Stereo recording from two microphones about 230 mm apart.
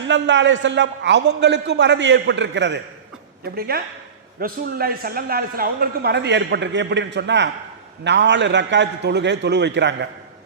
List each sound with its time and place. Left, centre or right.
0.1 s a man's voice: right